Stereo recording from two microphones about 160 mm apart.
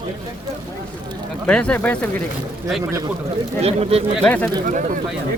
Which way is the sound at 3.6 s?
40° right (ahead or behind).